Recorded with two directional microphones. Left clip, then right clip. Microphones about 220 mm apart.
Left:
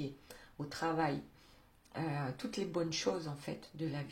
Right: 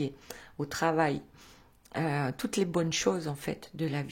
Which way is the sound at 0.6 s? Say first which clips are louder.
Right 8 dB; 45° right (ahead or behind).